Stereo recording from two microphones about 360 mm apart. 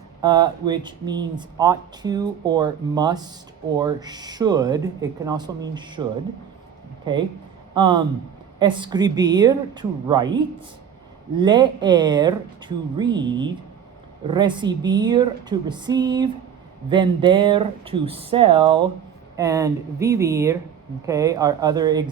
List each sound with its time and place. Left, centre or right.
0.2 s a man's voice: centre
11.3 s speech: centre